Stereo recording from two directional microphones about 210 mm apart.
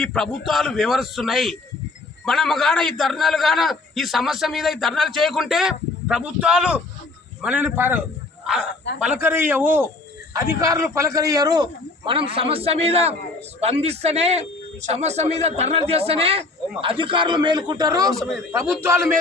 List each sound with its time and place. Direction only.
0.0 s a man's voice: centre (ahead or behind); by 18.1 s 20° right (ahead or behind)
18.1 s a man's voice: centre (ahead or behind)
18.5 s a man's voice: 10° right (ahead or behind)